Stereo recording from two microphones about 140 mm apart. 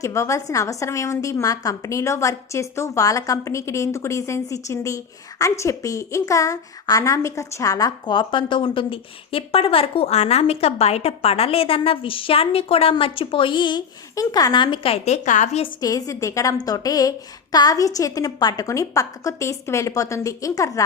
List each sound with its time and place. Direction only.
0.0 s a woman's voice: 20° left (ahead or behind); by 15.6 s 60° left (ahead or behind)
15.8 s a woman's voice: 25° left (ahead or behind)